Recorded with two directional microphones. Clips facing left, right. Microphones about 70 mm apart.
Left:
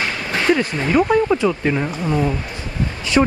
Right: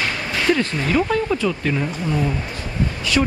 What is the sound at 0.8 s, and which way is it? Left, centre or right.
Speech, centre.